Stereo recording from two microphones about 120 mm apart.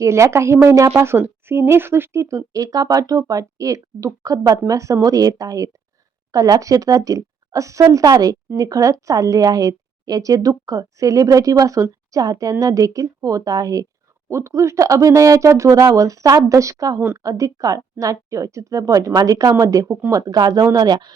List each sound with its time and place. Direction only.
0.0 s speech: 25° right (ahead or behind)